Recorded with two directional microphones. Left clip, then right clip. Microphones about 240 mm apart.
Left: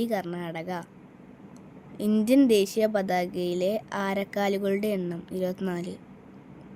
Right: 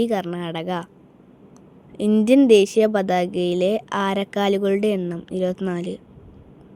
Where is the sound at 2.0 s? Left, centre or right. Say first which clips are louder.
Right 6 dB; centre.